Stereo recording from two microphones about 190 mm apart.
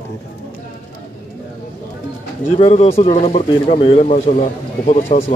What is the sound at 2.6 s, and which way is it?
Speech, 30° left (ahead or behind).